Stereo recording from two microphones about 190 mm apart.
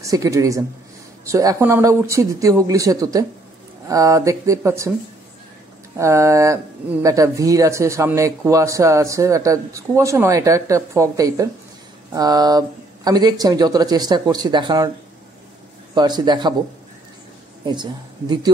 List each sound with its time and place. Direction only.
0.0 s speech: 15° right (ahead or behind)
5.9 s speech: 15° right (ahead or behind)
15.9 s speech: 20° right (ahead or behind)